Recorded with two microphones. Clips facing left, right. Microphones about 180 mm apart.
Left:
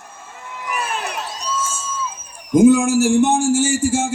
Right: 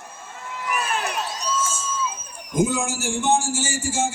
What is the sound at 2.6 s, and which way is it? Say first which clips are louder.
A man's voice: left 10 dB; 60° left (ahead or behind).